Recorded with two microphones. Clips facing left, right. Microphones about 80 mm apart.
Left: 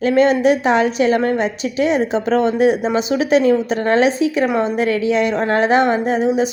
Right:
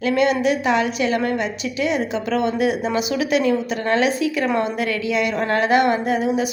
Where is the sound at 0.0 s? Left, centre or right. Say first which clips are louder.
Left 5 dB; left.